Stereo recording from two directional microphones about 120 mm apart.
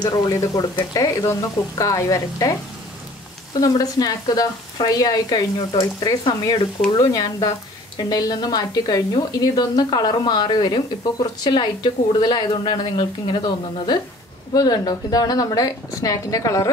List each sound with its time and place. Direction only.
0.0 s speech: 30° left (ahead or behind)
3.6 s a woman's voice: 30° left (ahead or behind)